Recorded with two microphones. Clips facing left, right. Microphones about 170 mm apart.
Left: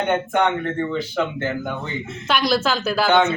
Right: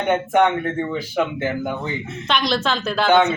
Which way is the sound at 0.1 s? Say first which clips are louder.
Right 5 dB; 10° right (ahead or behind).